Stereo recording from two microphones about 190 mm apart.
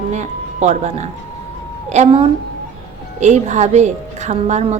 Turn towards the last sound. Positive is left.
turn(degrees=-35)  # may be behind; listen again after turning